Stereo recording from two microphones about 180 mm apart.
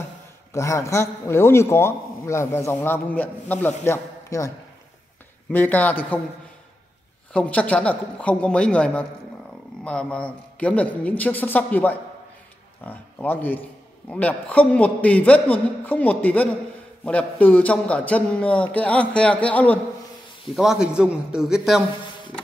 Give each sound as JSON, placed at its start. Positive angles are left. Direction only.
{"t": 0.5, "sound": "a man's voice", "side_deg": 15}
{"t": 5.5, "sound": "a man's voice", "side_deg": 10}
{"t": 7.3, "sound": "a man's voice", "side_deg": 5}
{"t": 20.5, "sound": "a man's voice", "side_deg": 0}